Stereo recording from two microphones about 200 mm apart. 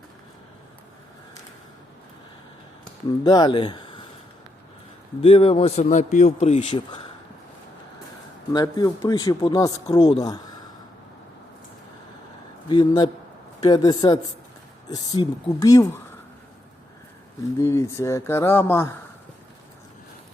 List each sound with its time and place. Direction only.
3.2 s speech: 20° left (ahead or behind)
5.2 s a man's voice: 30° left (ahead or behind)
8.5 s speech: 20° left (ahead or behind)
12.6 s speech: 20° left (ahead or behind)
17.6 s speech: 15° left (ahead or behind)